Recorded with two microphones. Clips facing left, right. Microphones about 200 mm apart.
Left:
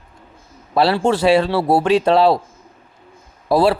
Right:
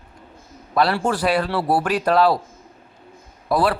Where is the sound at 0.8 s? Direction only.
25° left (ahead or behind).